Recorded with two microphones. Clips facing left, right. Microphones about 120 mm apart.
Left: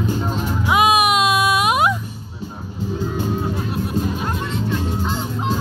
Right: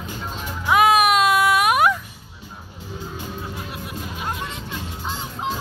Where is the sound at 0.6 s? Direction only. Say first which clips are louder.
Even; 15° left (ahead or behind).